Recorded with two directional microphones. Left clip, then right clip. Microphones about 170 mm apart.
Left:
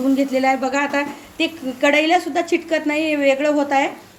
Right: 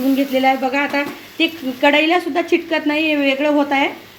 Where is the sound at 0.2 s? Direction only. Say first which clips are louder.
Right 2 dB; 10° right (ahead or behind).